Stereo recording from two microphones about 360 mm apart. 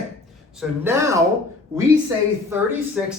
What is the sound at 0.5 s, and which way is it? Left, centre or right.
Speech, centre.